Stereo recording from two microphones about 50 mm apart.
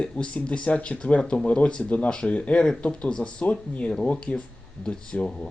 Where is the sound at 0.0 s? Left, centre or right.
Left.